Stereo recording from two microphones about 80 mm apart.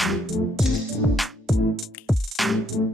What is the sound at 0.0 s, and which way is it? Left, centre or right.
Music, centre.